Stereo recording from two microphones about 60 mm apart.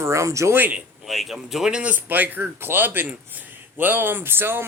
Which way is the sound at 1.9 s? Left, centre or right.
Right.